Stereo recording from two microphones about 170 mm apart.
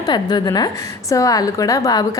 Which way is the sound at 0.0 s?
25° left (ahead or behind).